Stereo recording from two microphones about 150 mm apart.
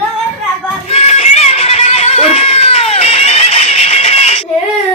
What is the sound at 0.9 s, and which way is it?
Music, 45° left (ahead or behind).